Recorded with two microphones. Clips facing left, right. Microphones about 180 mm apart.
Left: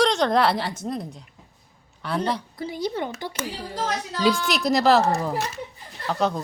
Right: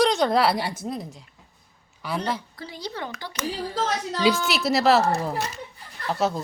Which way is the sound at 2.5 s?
20° left (ahead or behind).